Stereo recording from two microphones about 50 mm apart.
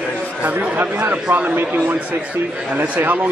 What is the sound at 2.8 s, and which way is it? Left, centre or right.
Speech, right.